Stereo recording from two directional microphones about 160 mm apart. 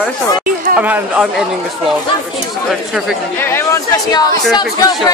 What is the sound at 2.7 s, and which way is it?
Speech, centre (ahead or behind).